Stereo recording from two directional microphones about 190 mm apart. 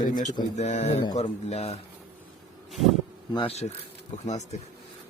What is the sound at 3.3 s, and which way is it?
Speech, 30° left (ahead or behind).